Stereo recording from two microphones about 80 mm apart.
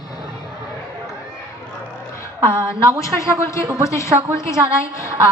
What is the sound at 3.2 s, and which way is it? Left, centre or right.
A woman's voice, left.